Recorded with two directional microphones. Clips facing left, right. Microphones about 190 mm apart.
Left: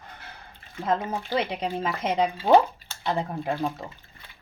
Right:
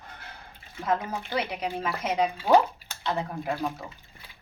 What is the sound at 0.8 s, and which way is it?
Speech, 25° left (ahead or behind).